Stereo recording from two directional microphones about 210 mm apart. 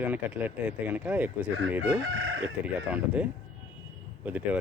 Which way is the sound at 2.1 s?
75° right (ahead or behind).